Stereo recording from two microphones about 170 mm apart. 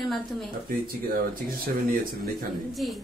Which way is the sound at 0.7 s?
60° right (ahead or behind).